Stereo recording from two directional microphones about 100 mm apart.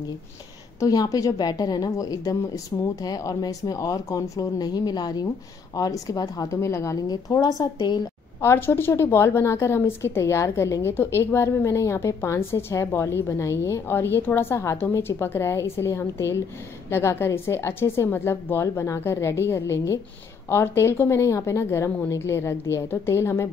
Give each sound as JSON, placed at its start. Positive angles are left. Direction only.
{"t": 0.7, "sound": "a woman's voice", "side_deg": 35}
{"t": 8.4, "sound": "a woman's voice", "side_deg": 25}